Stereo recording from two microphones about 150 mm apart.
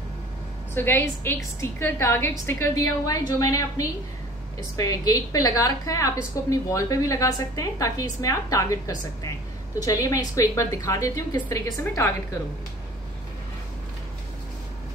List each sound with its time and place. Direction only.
0.7 s a woman's voice: 15° left (ahead or behind)